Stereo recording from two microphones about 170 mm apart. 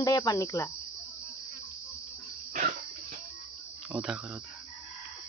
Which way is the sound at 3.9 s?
5° right (ahead or behind).